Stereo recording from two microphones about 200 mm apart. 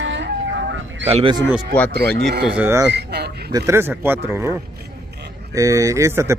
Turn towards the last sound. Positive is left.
turn(degrees=-15)  # may be behind; listen again after turning